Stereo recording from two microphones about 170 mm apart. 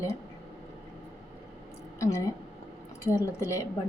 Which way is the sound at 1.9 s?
15° left (ahead or behind).